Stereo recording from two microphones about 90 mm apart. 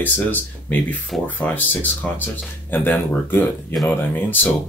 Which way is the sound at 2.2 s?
20° left (ahead or behind).